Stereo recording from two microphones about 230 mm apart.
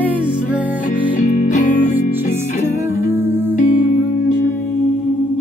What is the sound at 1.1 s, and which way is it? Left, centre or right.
Music, left.